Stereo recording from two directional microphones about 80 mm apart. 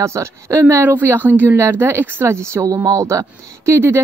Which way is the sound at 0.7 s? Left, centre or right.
Right.